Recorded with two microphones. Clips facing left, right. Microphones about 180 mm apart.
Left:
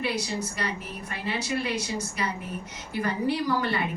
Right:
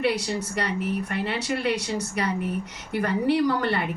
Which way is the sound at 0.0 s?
65° right (ahead or behind).